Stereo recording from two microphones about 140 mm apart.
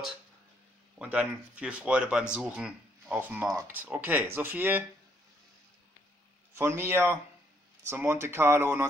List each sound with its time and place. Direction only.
0.9 s speech: 10° right (ahead or behind)
6.5 s a man's voice: 20° right (ahead or behind)